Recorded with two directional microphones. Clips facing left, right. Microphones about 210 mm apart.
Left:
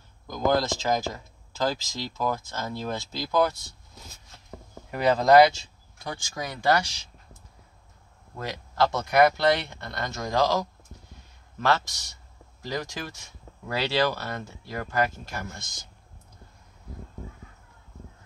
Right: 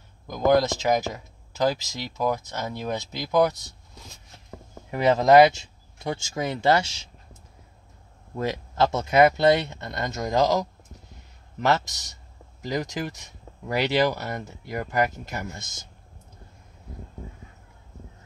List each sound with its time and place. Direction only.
0.3 s speech: 20° right (ahead or behind)
4.9 s speech: 20° right (ahead or behind)
8.4 s speech: 20° right (ahead or behind)